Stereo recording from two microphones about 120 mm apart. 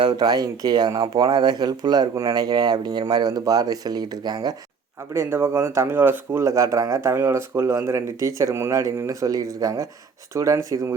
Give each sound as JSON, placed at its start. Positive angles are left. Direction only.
{"t": 0.0, "sound": "speech", "side_deg": -40}
{"t": 5.1, "sound": "speech", "side_deg": -20}